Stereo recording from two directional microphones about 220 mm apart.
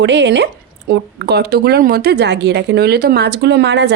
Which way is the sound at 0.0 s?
50° right (ahead or behind).